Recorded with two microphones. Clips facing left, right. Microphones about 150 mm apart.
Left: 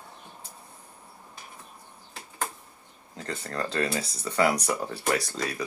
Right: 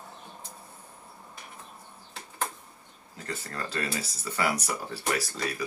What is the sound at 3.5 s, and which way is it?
Speech, 35° left (ahead or behind).